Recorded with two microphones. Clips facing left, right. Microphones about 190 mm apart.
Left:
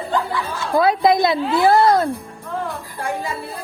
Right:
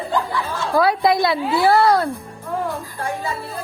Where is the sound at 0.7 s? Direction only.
20° left (ahead or behind).